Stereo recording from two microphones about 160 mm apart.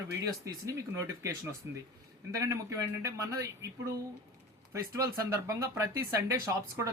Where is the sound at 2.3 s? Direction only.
20° right (ahead or behind).